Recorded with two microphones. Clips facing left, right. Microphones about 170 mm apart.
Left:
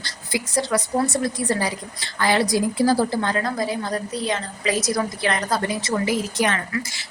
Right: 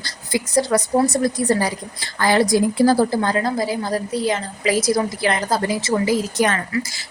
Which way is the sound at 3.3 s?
30° right (ahead or behind).